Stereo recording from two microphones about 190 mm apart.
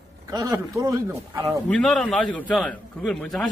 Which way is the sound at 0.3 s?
20° right (ahead or behind).